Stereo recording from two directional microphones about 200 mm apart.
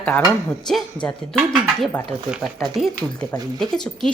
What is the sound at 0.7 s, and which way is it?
A woman's voice, 5° left (ahead or behind).